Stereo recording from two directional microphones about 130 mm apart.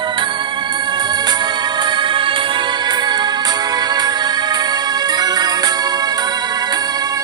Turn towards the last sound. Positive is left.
turn(degrees=-30)  # may be behind; listen again after turning